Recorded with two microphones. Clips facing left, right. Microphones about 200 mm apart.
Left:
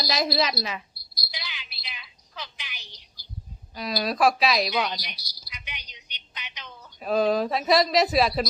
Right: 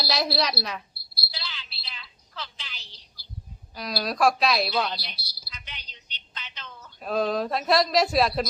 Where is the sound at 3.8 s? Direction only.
Centre (ahead or behind).